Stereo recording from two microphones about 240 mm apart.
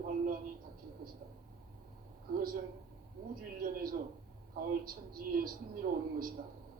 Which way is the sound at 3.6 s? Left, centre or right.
Right.